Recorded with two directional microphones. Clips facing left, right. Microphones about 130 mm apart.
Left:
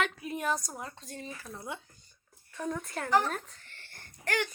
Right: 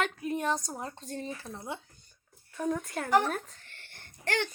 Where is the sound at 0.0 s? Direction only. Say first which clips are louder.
Right 2 dB; 40° right (ahead or behind).